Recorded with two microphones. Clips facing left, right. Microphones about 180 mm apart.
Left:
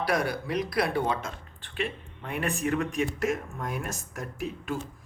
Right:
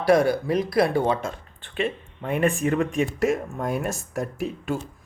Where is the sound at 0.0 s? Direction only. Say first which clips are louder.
Right 9 dB; 25° right (ahead or behind).